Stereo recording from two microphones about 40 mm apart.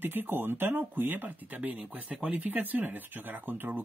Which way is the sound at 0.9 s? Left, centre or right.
Right.